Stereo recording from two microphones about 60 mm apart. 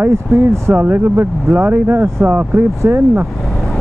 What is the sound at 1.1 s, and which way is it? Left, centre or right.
Speech, right.